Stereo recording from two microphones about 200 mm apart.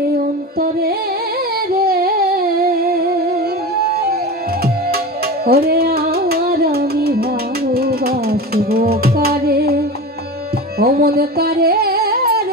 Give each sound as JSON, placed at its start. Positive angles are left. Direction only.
{"t": 0.6, "sound": "music", "side_deg": -50}
{"t": 10.8, "sound": "music", "side_deg": -50}